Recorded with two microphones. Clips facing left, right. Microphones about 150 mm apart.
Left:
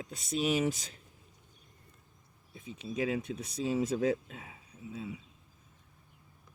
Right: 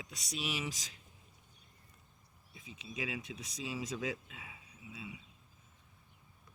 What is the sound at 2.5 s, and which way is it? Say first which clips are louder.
Speech: left 9 dB; 50° left (ahead or behind).